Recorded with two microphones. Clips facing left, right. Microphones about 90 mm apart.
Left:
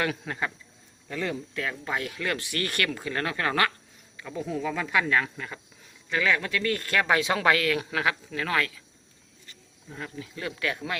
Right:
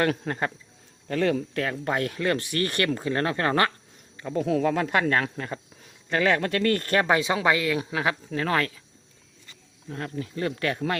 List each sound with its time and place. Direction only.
0.0 s speech: 45° right (ahead or behind)
1.0 s speech: 60° right (ahead or behind)
1.6 s speech: 50° right (ahead or behind); by 3.7 s 35° right (ahead or behind)
4.4 s speech: 70° right (ahead or behind); by 6.9 s 50° right (ahead or behind)
6.9 s speech: 30° right (ahead or behind)
7.3 s speech: 20° right (ahead or behind); by 8.8 s 35° right (ahead or behind)
9.9 s speech: 50° right (ahead or behind)